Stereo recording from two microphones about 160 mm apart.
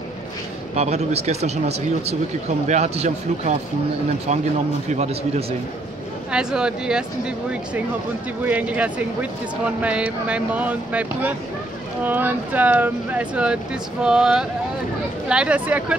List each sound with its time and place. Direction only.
0.7 s speech: 40° right (ahead or behind)
2.7 s speech: 45° right (ahead or behind)
6.3 s speech: 5° right (ahead or behind)